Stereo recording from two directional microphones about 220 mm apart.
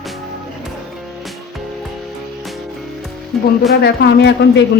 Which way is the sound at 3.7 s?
50° left (ahead or behind).